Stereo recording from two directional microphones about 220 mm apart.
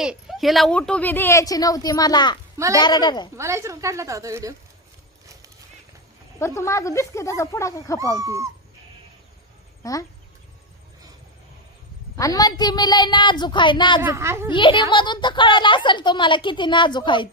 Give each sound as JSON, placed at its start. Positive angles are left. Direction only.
{"t": 0.0, "sound": "a woman's voice", "side_deg": 0}
{"t": 3.3, "sound": "a woman's voice", "side_deg": -15}
{"t": 6.4, "sound": "speech", "side_deg": 10}
{"t": 8.1, "sound": "a woman's voice", "side_deg": -15}
{"t": 9.8, "sound": "speech", "side_deg": 15}
{"t": 12.1, "sound": "a woman's voice", "side_deg": 15}
{"t": 14.0, "sound": "a woman's voice", "side_deg": -10}
{"t": 14.5, "sound": "a woman's voice", "side_deg": 20}